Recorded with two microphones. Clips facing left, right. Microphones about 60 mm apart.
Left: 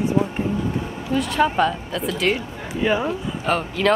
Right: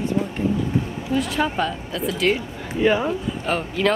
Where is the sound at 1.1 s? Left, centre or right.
Centre.